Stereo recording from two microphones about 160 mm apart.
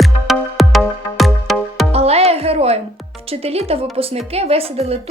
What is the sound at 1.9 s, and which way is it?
Music, 40° right (ahead or behind).